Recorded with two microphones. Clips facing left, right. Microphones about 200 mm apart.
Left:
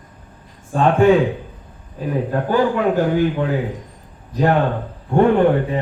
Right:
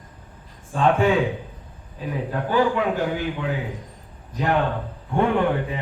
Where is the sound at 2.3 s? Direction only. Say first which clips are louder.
Left 2 dB; 45° left (ahead or behind).